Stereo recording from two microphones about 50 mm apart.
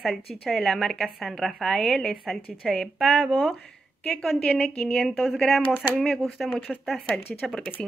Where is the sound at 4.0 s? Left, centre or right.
Left.